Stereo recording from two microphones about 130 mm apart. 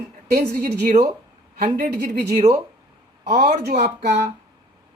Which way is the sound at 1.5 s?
90° right.